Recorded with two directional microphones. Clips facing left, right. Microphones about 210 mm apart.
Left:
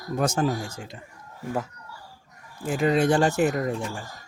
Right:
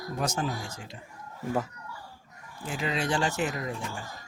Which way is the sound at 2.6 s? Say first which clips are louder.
Left 9 dB; 50° left (ahead or behind).